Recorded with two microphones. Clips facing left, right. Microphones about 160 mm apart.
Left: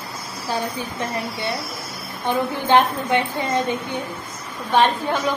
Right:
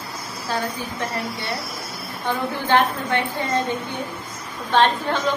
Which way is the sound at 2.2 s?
15° left (ahead or behind).